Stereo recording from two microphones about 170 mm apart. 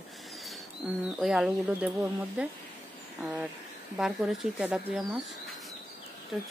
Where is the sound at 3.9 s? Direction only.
5° right (ahead or behind).